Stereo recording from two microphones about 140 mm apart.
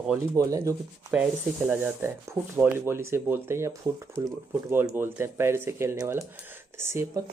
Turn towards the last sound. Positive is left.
turn(degrees=-20)  # may be behind; listen again after turning